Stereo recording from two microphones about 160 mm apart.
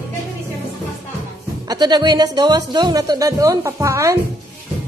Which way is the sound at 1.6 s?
25° right (ahead or behind).